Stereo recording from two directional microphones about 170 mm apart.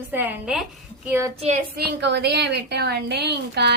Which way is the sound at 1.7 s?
85° right.